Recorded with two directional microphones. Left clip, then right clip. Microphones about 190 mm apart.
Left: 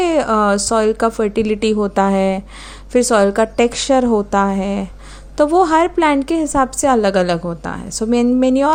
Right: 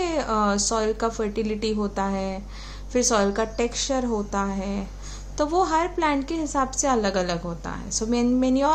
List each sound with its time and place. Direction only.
0.0 s speech: 40° left (ahead or behind)